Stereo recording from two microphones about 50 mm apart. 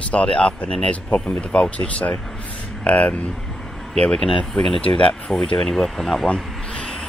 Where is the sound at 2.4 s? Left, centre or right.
Left.